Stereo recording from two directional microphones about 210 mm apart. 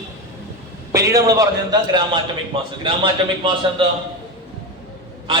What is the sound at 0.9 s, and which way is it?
A man's voice, 15° right (ahead or behind).